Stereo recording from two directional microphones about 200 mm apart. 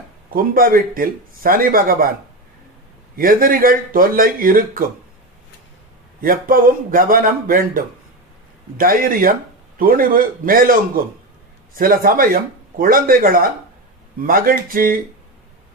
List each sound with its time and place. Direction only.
0.3 s a man's voice: 45° right (ahead or behind)
3.2 s a man's voice: 45° right (ahead or behind)
6.2 s a man's voice: 45° right (ahead or behind)